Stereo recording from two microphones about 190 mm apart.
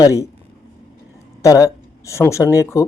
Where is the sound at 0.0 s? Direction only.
15° left (ahead or behind).